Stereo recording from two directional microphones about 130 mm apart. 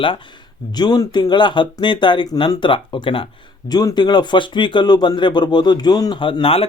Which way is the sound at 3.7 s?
30° left (ahead or behind).